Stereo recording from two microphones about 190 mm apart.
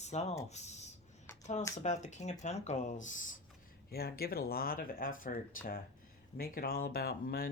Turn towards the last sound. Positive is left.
turn(degrees=50)  # may be behind; listen again after turning